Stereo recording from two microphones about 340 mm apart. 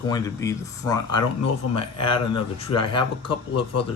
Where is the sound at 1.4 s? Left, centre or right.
Left.